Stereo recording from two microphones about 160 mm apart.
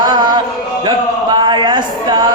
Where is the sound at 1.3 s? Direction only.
30° right (ahead or behind).